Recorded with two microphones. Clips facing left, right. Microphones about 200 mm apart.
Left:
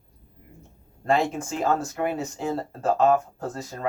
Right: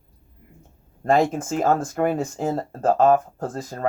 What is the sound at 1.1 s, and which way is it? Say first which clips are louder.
Speech: right 4 dB; 45° right (ahead or behind).